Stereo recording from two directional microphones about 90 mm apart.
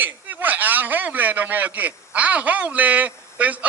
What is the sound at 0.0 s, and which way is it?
A man's voice, 20° right (ahead or behind).